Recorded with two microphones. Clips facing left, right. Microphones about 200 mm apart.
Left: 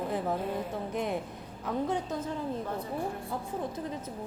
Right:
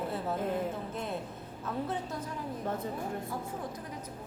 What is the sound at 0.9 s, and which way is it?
Music, 15° left (ahead or behind).